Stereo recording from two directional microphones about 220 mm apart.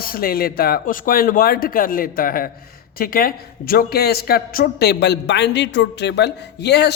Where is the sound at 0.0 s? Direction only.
40° left (ahead or behind).